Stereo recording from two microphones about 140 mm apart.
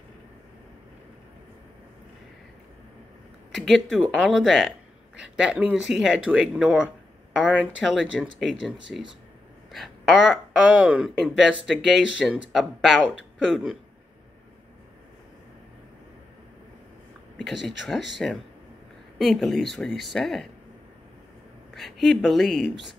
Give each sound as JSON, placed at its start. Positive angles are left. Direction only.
{"t": 3.5, "sound": "speech", "side_deg": 0}
{"t": 17.4, "sound": "speech", "side_deg": 0}
{"t": 21.7, "sound": "speech", "side_deg": 0}